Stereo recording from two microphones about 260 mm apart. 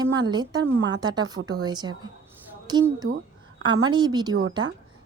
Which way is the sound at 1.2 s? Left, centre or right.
Right.